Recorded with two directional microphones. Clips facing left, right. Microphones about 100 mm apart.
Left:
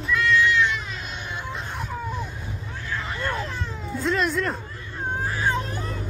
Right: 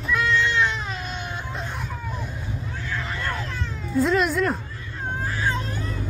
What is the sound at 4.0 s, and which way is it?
Speech, centre (ahead or behind).